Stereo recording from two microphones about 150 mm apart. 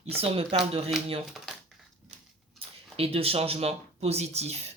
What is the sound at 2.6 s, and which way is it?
Speech, 40° right (ahead or behind).